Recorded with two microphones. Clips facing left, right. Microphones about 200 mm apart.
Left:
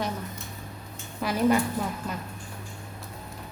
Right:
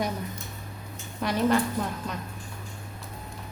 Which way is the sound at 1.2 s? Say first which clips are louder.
Left 1 dB; 5° left (ahead or behind).